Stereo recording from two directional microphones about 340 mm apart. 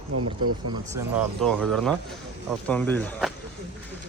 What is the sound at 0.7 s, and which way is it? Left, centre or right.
Speech, centre.